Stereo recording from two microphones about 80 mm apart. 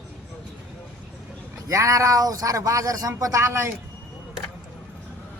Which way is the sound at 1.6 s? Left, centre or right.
Right.